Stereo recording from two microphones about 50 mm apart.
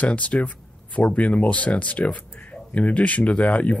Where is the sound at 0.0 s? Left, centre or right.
Left.